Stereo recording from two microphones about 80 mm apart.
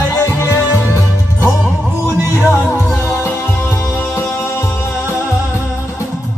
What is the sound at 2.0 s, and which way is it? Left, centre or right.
Music, right.